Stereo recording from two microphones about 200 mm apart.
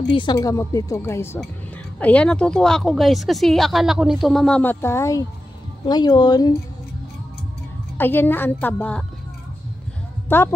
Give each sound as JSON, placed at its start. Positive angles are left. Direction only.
{"t": 0.1, "sound": "speech", "side_deg": 20}
{"t": 8.0, "sound": "speech", "side_deg": 10}
{"t": 10.2, "sound": "a woman's voice", "side_deg": 10}